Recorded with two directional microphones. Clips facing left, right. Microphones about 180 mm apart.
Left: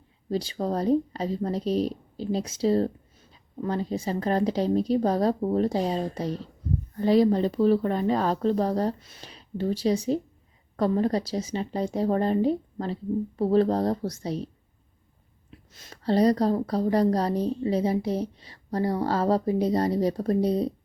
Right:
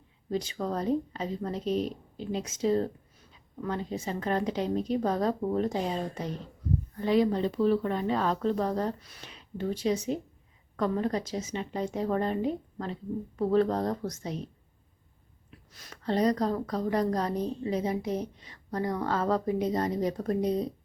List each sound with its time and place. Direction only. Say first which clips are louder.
0.3 s a woman's voice: left 4 dB; 35° left (ahead or behind)